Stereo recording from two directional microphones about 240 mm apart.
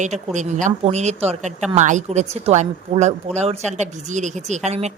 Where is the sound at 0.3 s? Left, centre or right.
Right.